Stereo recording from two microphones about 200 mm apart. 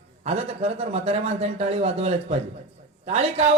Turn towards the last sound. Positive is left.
turn(degrees=-30)  # may be behind; listen again after turning